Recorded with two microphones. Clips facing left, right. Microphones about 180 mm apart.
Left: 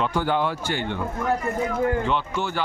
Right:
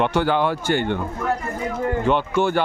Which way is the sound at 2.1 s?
55° right (ahead or behind).